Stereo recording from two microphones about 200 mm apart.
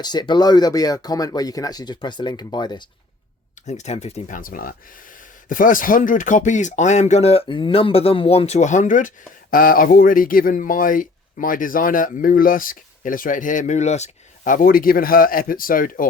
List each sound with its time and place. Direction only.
0.0 s speech: 20° left (ahead or behind)
3.7 s speech: 35° left (ahead or behind)